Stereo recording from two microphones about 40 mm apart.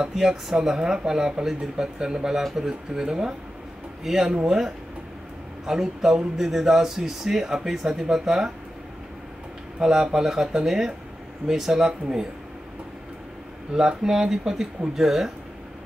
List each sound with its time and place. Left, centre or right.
0.0 s speech: centre
9.8 s speech: centre
13.7 s speech: centre